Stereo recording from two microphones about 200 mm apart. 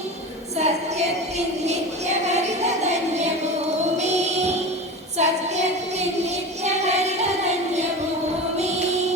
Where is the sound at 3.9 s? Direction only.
35° right (ahead or behind).